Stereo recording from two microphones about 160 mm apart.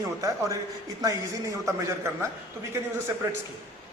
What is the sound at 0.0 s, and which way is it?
Speech, 20° right (ahead or behind).